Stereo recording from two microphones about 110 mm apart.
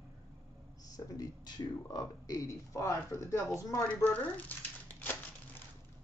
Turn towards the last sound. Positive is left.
turn(degrees=15)  # may be behind; listen again after turning